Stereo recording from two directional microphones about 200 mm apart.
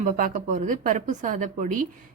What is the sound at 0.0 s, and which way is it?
Speech, 40° right (ahead or behind).